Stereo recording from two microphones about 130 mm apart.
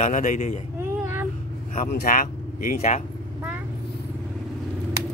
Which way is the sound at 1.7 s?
90° left.